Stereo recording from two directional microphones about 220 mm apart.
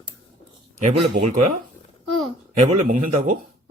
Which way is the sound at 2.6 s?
35° right (ahead or behind).